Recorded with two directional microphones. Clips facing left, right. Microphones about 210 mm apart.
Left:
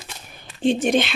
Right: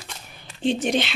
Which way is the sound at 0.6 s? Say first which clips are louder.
Left 3 dB; 50° left (ahead or behind).